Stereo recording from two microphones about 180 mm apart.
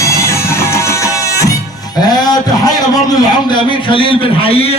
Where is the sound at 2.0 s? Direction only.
20° left (ahead or behind).